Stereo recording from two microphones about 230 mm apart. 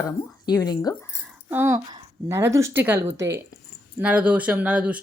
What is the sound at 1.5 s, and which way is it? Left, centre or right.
A woman's voice, centre.